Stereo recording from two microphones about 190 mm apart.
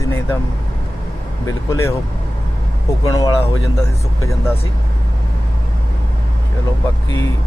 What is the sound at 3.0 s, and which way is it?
Speech, 20° left (ahead or behind).